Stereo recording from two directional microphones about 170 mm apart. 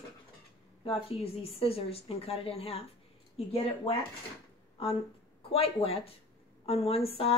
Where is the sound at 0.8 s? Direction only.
35° left (ahead or behind).